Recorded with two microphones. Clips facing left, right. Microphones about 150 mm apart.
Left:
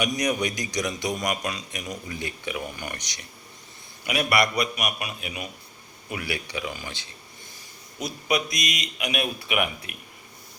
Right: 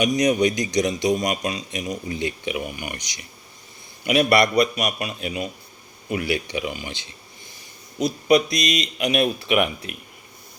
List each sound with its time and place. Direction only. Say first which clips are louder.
0.0 s a man's voice: right 7 dB; 20° right (ahead or behind)
4.0 s a man's voice: right 6 dB; 25° right (ahead or behind)
8.4 s speech: right 7 dB; 15° left (ahead or behind)
8.7 s a man's voice: right 9 dB; 30° right (ahead or behind)